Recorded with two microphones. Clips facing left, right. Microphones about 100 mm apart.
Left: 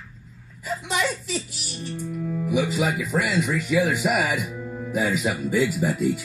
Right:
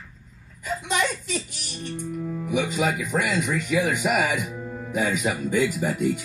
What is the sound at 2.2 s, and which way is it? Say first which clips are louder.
Speech: left 2 dB; 15° right (ahead or behind).